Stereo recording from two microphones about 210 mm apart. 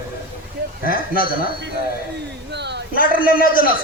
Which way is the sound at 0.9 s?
45° left (ahead or behind).